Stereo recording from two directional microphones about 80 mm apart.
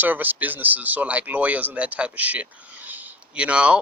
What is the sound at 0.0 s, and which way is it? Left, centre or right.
Speech, right.